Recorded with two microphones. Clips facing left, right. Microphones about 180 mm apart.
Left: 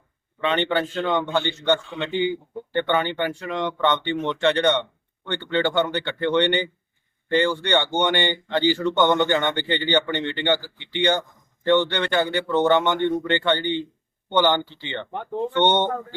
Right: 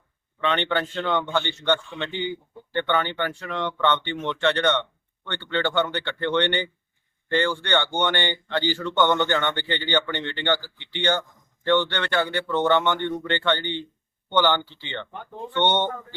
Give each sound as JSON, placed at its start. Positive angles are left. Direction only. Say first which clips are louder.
{"t": 0.4, "sound": "speech", "louder": "left 2 dB", "side_deg": 10}
{"t": 15.1, "sound": "speech", "louder": "left 9 dB", "side_deg": 65}
{"t": 15.5, "sound": "speech", "louder": "left 2 dB", "side_deg": 15}